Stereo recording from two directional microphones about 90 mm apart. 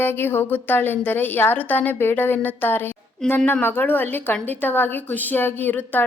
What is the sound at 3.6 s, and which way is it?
A woman's voice, 20° left (ahead or behind).